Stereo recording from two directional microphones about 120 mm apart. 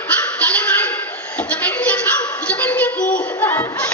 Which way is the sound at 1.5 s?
15° left (ahead or behind).